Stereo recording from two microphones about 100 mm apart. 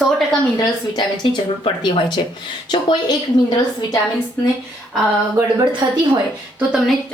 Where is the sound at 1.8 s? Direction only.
50° left (ahead or behind).